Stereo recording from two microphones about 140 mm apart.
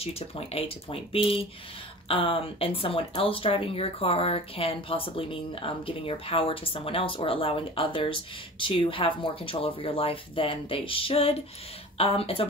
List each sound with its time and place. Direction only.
0.0 s speech: 45° left (ahead or behind)